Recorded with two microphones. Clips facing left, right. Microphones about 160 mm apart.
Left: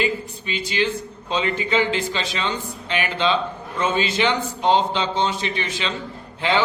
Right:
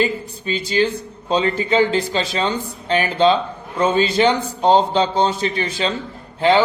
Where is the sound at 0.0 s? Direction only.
40° right (ahead or behind).